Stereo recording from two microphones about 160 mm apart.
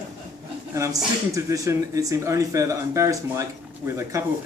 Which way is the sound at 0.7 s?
20° right (ahead or behind).